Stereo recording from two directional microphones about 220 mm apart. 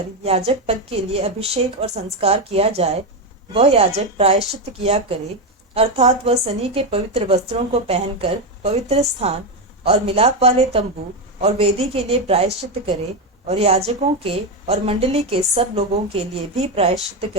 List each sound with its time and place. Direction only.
0.2 s a woman's voice: 30° right (ahead or behind)
13.5 s a woman's voice: 30° right (ahead or behind)